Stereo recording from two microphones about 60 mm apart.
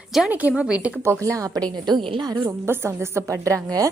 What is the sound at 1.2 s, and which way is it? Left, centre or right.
Speech, right.